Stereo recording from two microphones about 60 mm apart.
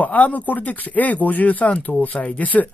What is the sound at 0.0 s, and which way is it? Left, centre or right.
Speech, left.